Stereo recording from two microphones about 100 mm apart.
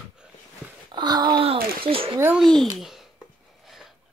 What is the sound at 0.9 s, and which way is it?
Speech, 45° right (ahead or behind).